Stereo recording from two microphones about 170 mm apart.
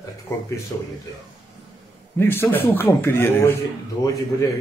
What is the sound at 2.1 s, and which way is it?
A man's voice, 15° left (ahead or behind).